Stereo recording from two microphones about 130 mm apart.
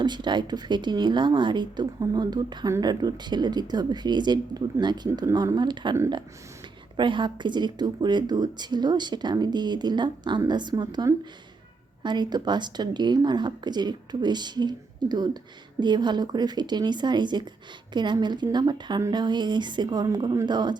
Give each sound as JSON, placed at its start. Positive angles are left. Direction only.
{"t": 0.0, "sound": "speech", "side_deg": -35}